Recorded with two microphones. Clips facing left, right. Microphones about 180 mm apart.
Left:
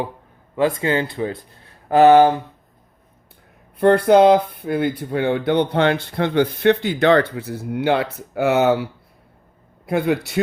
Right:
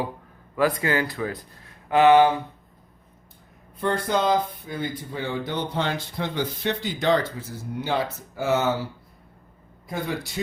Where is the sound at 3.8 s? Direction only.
60° left (ahead or behind).